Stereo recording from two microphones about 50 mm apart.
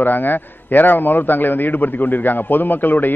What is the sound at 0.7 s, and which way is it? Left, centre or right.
A man's voice, left.